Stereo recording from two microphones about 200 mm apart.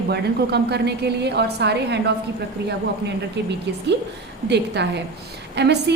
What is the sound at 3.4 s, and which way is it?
A woman's voice, 60° right (ahead or behind).